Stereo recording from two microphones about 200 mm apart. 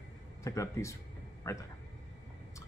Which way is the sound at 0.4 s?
15° left (ahead or behind).